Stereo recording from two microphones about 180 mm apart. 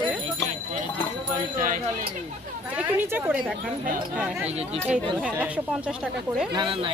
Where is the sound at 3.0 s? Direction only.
10° right (ahead or behind).